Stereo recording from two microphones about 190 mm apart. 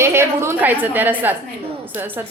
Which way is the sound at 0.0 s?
15° right (ahead or behind).